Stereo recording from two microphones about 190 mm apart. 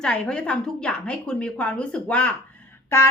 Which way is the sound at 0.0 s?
5° left (ahead or behind).